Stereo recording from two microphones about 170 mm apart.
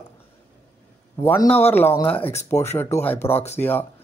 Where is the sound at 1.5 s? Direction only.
10° left (ahead or behind).